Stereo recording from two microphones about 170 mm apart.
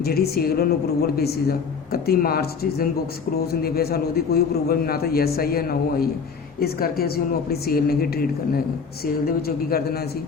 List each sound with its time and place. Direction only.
0.0 s a woman's voice: 65° left (ahead or behind)